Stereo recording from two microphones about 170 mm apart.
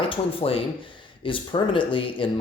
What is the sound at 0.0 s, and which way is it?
Speech, 35° left (ahead or behind).